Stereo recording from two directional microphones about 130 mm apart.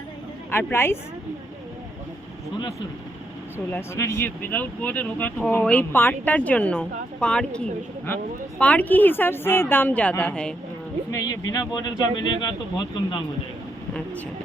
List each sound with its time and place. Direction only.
0.5 s a woman's voice: 20° left (ahead or behind)
3.7 s speech: 20° left (ahead or behind)
11.1 s speech: 30° left (ahead or behind)